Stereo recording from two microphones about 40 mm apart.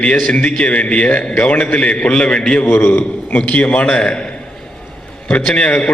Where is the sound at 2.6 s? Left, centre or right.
Left.